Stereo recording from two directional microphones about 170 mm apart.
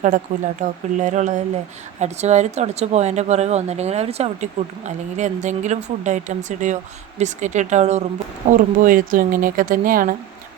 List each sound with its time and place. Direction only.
0.3 s speech: 50° right (ahead or behind)